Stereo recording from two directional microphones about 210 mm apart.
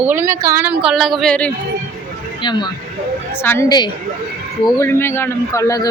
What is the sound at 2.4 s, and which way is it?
Speech, 20° left (ahead or behind).